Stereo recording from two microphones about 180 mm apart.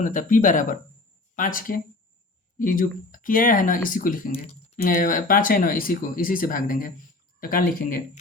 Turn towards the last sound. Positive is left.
turn(degrees=50)  # may be behind; listen again after turning